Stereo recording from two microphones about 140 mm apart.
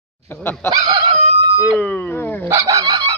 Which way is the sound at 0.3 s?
15° left (ahead or behind).